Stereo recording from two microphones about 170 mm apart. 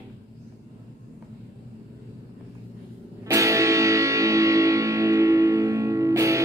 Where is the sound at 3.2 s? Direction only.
20° right (ahead or behind).